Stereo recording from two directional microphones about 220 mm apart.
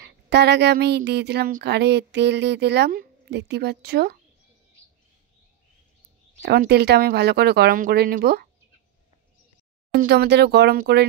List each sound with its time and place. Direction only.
0.0 s speech: 50° right (ahead or behind)
6.4 s speech: 45° right (ahead or behind)
9.9 s speech: 50° right (ahead or behind)